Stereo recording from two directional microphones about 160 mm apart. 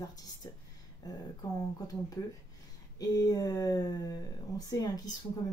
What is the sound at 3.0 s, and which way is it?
Speech, 25° left (ahead or behind).